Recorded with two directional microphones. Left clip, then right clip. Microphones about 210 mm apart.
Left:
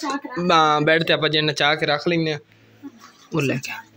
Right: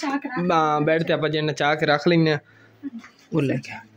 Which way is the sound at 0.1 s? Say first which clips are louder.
Left 4 dB; 5° right (ahead or behind).